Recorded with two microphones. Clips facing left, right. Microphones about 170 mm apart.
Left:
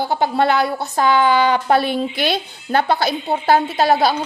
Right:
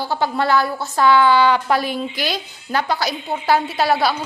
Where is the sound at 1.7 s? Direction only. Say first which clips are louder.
Left 3 dB; 25° left (ahead or behind).